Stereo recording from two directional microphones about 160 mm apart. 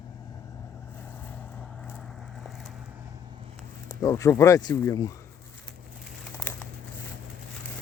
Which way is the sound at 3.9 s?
20° left (ahead or behind).